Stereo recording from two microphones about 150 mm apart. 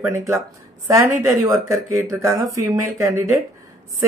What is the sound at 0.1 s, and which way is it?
Speech, 20° right (ahead or behind).